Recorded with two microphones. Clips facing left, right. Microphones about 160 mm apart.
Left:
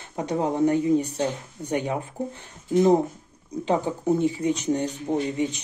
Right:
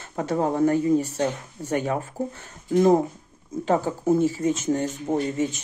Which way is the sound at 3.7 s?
20° left (ahead or behind).